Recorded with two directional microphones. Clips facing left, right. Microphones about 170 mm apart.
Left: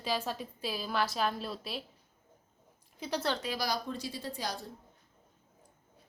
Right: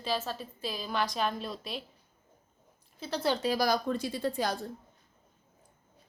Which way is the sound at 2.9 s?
15° left (ahead or behind).